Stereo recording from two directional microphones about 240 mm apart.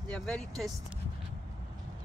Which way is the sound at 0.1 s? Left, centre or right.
Centre.